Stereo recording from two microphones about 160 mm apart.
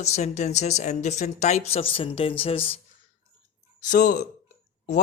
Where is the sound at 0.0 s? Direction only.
45° left (ahead or behind).